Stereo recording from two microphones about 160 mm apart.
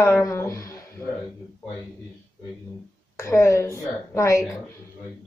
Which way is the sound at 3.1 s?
20° left (ahead or behind).